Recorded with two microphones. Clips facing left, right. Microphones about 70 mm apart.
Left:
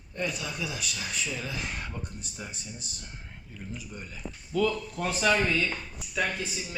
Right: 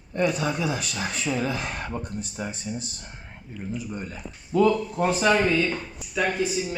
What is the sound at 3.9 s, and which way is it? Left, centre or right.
Speech, right.